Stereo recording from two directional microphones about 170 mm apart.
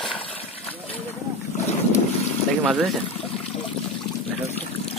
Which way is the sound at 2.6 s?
Centre (ahead or behind).